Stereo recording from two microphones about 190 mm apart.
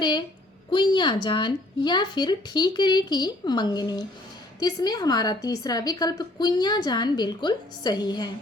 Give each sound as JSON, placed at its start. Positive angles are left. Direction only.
{"t": 0.0, "sound": "a woman's voice", "side_deg": 25}